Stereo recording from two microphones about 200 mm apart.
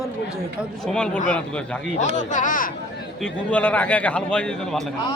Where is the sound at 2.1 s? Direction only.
40° left (ahead or behind).